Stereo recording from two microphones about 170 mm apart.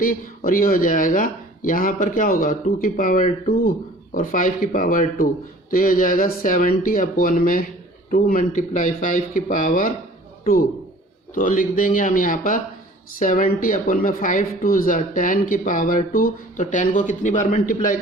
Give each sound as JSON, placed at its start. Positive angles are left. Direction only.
{"t": 0.0, "sound": "a man's voice", "side_deg": 55}
{"t": 11.3, "sound": "speech", "side_deg": 55}